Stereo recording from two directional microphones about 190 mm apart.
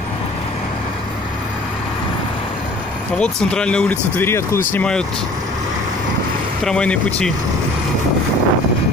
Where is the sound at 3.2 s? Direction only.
5° left (ahead or behind).